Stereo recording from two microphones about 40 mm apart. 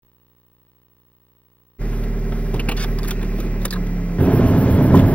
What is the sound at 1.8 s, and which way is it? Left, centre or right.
Vehicle, left.